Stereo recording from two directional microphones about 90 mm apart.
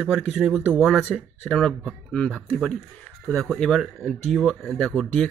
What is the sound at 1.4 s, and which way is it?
Speech, 10° left (ahead or behind).